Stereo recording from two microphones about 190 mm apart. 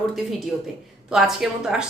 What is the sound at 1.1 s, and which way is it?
Speech, 5° right (ahead or behind).